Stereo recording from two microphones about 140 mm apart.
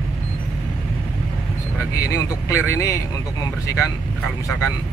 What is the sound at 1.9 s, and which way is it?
Speech, 20° left (ahead or behind).